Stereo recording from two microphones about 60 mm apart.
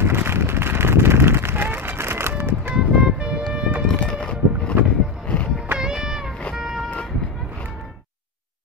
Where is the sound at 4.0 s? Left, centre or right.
Centre.